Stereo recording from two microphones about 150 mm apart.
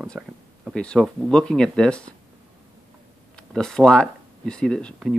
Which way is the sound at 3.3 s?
5° left (ahead or behind).